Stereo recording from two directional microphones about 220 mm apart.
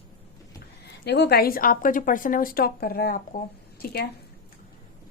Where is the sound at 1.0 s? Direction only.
50° left (ahead or behind).